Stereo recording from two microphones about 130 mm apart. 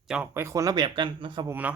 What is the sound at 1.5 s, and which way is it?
Speech, 10° right (ahead or behind).